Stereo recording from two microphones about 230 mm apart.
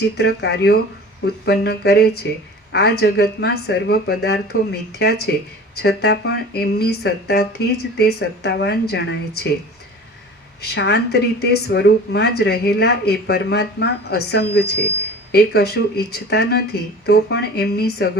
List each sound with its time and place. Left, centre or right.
0.2 s a woman's voice: left
10.6 s a woman's voice: left